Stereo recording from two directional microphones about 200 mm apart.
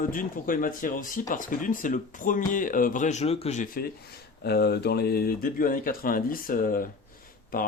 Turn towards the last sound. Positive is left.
turn(degrees=45)  # may be behind; listen again after turning